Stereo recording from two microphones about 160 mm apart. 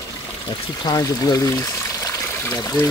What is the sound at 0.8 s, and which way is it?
Speech, 25° left (ahead or behind).